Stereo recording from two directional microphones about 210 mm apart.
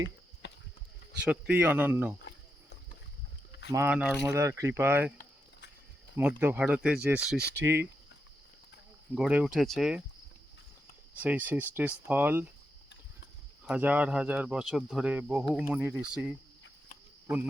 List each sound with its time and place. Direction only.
0.4 s clip-clop: 55° left (ahead or behind)
1.2 s speech: 5° right (ahead or behind)
3.7 s speech: 10° right (ahead or behind)
5.1 s a sound: 50° left (ahead or behind)
6.1 s speech: 10° right (ahead or behind)
7.3 s speech: 50° right (ahead or behind)
9.1 s speech: 5° right (ahead or behind)
11.1 s speech: 5° right (ahead or behind)
13.7 s speech: 5° right (ahead or behind)